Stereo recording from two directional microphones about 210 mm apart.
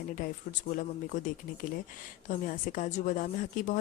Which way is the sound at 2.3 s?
40° left (ahead or behind).